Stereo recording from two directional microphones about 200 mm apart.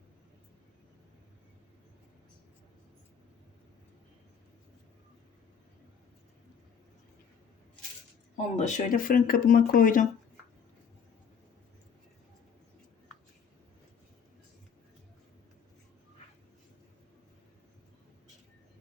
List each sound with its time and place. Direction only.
8.5 s speech: 40° left (ahead or behind)